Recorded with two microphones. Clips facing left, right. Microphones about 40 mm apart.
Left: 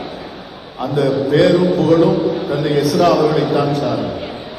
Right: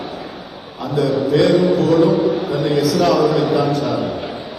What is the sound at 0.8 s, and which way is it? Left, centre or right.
A man's voice, left.